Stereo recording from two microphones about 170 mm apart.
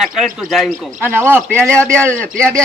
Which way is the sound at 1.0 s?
15° right (ahead or behind).